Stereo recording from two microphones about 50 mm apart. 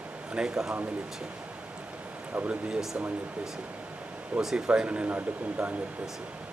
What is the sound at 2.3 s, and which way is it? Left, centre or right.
Speech, right.